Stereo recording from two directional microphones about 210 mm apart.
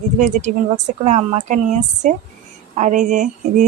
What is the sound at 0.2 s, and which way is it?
Speech, 35° right (ahead or behind).